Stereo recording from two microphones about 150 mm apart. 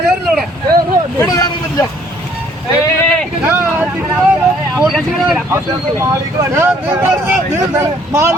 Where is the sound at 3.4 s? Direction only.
15° right (ahead or behind).